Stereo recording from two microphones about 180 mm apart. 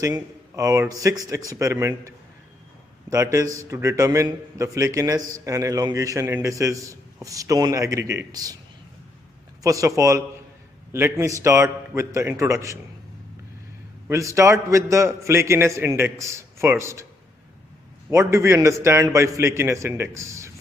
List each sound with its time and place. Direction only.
0.0 s a man's voice: 20° right (ahead or behind)
9.6 s a man's voice: 15° right (ahead or behind)
14.1 s a man's voice: 15° right (ahead or behind)
18.1 s a man's voice: 15° right (ahead or behind)